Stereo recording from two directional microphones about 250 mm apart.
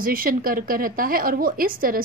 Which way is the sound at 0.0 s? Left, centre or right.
Right.